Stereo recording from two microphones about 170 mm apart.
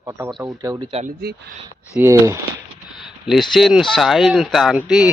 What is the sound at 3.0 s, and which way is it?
Speech, centre (ahead or behind).